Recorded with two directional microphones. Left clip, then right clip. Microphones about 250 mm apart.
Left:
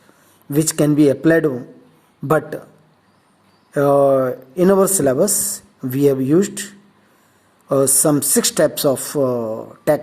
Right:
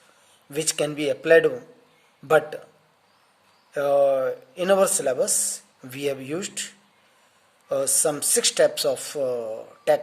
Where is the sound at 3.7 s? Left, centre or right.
Centre.